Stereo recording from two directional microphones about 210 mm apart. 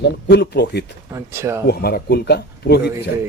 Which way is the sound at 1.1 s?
10° right (ahead or behind).